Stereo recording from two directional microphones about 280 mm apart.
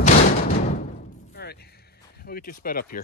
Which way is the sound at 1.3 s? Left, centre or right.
Left.